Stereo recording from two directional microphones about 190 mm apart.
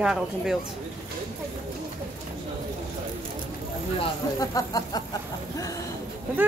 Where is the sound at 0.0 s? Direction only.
5° right (ahead or behind).